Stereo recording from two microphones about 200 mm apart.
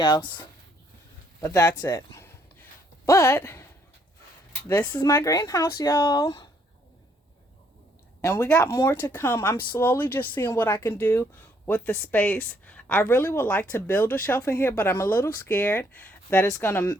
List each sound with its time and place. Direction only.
0.0 s speech: 20° left (ahead or behind)
1.4 s a sound: 15° left (ahead or behind)
3.1 s speech: 15° left (ahead or behind)
4.7 s speech: 10° left (ahead or behind)
8.2 s speech: 10° left (ahead or behind)